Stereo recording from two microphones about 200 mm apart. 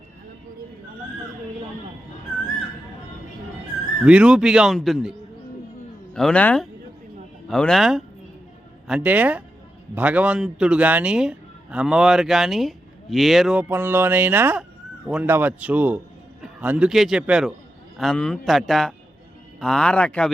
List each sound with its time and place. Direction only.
4.0 s a man's voice: 5° right (ahead or behind)
6.1 s a man's voice: 5° left (ahead or behind)